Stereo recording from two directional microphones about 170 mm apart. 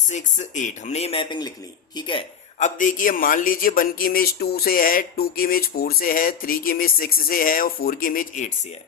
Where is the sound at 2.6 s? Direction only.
50° left (ahead or behind).